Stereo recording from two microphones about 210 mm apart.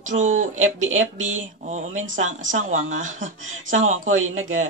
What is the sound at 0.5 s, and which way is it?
Speech, 75° right (ahead or behind).